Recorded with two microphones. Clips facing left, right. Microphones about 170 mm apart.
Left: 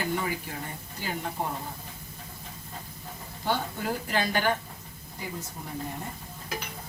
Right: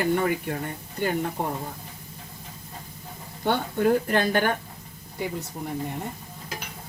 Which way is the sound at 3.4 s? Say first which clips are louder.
Right 7 dB; 55° right (ahead or behind).